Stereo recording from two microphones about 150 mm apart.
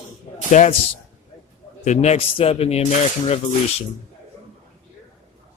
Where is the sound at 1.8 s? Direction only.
50° left (ahead or behind).